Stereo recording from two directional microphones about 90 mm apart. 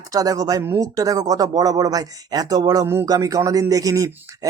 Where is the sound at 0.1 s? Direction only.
40° right (ahead or behind).